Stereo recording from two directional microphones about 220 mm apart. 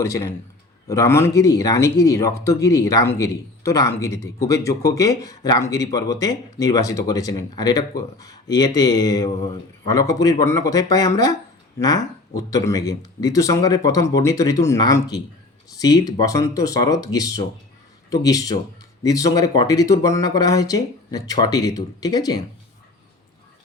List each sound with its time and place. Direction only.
0.0 s speech: 15° left (ahead or behind)